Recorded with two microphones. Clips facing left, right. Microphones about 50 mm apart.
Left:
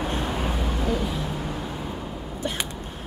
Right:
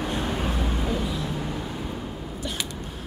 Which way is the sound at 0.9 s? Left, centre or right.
Left.